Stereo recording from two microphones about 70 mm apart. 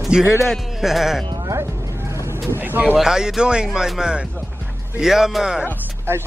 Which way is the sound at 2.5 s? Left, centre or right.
Right.